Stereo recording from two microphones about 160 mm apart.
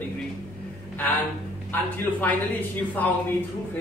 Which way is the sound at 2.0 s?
10° left (ahead or behind).